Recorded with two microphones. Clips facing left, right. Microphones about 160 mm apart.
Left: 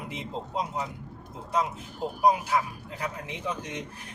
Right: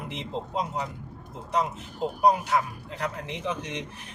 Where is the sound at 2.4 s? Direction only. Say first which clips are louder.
Right 1 dB; centre (ahead or behind).